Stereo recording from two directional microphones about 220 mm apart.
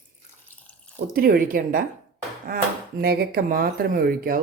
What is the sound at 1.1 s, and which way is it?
Speech, 40° right (ahead or behind).